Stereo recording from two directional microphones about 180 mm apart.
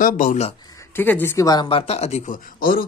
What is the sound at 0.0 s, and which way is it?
Speech, 45° left (ahead or behind).